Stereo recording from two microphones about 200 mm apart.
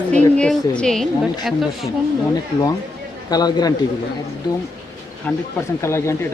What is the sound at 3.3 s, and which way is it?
Speech, 20° left (ahead or behind).